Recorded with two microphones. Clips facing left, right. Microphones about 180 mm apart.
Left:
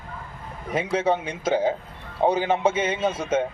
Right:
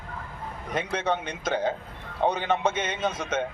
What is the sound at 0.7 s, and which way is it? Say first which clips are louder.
Speech: left 5 dB; 5° left (ahead or behind).